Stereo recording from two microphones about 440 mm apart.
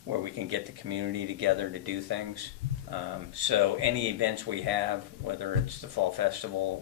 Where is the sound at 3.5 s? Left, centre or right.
Right.